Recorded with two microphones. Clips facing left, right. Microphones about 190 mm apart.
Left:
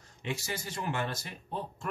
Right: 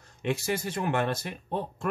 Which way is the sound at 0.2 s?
60° right (ahead or behind).